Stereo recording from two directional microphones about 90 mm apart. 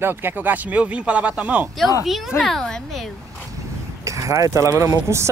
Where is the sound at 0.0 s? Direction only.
25° right (ahead or behind).